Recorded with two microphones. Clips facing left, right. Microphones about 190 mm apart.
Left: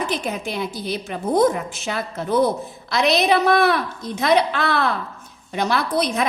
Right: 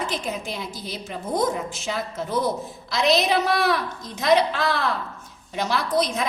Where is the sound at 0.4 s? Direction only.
65° left (ahead or behind).